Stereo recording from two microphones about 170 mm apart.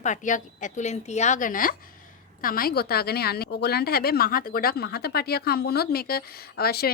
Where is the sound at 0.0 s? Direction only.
45° left (ahead or behind).